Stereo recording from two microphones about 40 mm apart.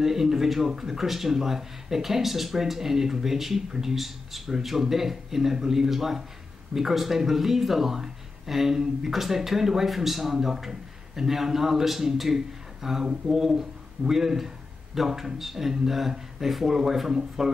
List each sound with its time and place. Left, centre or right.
0.0 s speech: centre